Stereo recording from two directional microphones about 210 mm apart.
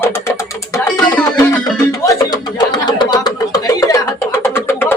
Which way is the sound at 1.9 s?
15° left (ahead or behind).